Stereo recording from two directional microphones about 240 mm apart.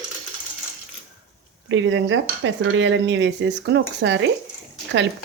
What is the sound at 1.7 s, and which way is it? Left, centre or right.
Dishes, right.